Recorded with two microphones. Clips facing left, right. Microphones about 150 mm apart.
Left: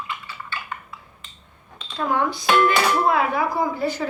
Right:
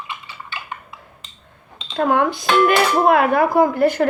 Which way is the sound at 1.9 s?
60° right (ahead or behind).